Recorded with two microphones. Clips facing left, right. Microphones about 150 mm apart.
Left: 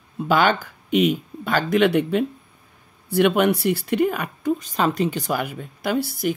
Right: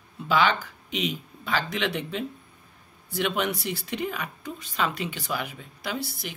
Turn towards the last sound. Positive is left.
turn(degrees=50)  # may be behind; listen again after turning